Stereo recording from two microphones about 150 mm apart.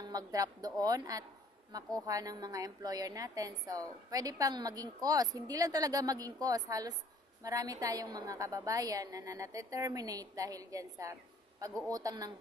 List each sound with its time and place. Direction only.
0.0 s a woman's voice: 25° right (ahead or behind)